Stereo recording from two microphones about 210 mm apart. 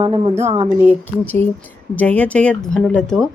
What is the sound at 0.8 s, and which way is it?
Speech, 10° left (ahead or behind).